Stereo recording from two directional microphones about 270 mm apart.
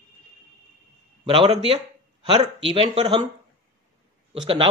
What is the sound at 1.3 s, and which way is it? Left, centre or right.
Speech, centre.